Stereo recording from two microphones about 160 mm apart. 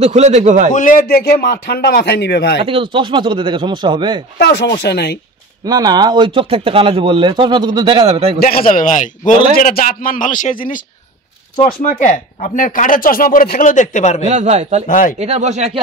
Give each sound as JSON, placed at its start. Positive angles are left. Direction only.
{"t": 0.0, "sound": "a man's voice", "side_deg": -45}
{"t": 0.7, "sound": "speech", "side_deg": 55}
{"t": 2.6, "sound": "speech", "side_deg": -35}
{"t": 4.4, "sound": "speech", "side_deg": 85}
{"t": 5.7, "sound": "speech", "side_deg": -25}
{"t": 8.4, "sound": "speech", "side_deg": 65}
{"t": 14.2, "sound": "a man's voice", "side_deg": -45}
{"t": 14.9, "sound": "speech", "side_deg": 55}
{"t": 15.1, "sound": "a man's voice", "side_deg": -45}